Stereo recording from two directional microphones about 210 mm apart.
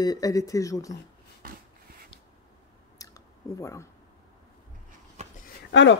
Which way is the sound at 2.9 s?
15° left (ahead or behind).